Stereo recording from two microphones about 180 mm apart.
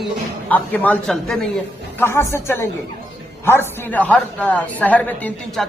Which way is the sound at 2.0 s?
15° left (ahead or behind).